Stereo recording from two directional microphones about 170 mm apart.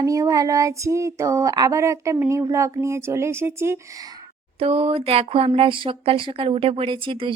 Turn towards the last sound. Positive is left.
turn(degrees=-30)  # may be behind; listen again after turning